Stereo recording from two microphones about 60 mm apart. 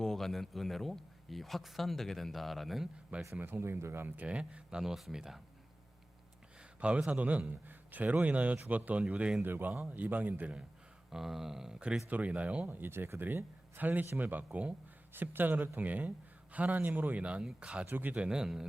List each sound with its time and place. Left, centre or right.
0.0 s speech: centre
3.4 s speech: right
4.3 s speech: centre
4.8 s speech: centre
6.7 s a man's voice: right
9.4 s speech: right
11.1 s speech: centre
12.0 s speech: right
12.6 s speech: right
15.1 s speech: right; by 17.8 s centre
17.8 s speech: right; by 18.7 s centre